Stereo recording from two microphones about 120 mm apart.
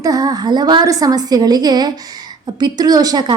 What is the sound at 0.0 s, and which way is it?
Speech, 30° right (ahead or behind).